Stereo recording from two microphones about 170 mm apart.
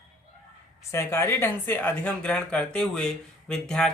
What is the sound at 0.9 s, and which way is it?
Speech, 15° left (ahead or behind).